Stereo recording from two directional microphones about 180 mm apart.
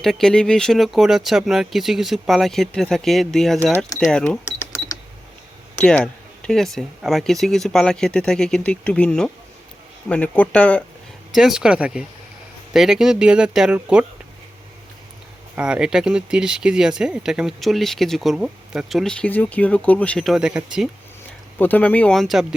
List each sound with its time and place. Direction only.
0.0 s speech: centre (ahead or behind)
4.0 s cash register: 5° left (ahead or behind)
5.7 s speech: 5° left (ahead or behind)
11.3 s speech: 5° right (ahead or behind)
15.5 s speech: 5° right (ahead or behind)
21.6 s speech: 10° left (ahead or behind)